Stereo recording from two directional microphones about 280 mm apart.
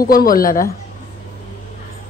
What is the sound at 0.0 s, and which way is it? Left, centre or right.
Speech, left.